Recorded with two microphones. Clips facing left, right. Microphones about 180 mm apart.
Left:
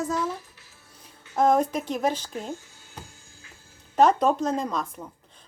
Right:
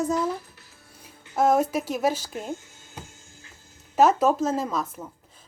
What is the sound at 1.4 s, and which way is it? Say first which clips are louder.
Speech: even; 5° right (ahead or behind).